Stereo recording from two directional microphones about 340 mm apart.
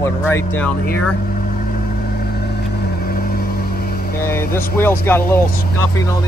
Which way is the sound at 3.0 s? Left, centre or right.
Left.